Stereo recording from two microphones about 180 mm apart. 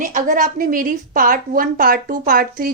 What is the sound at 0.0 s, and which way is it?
A woman's voice, 45° right (ahead or behind).